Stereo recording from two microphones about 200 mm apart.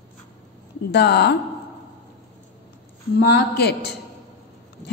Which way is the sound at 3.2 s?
55° left (ahead or behind).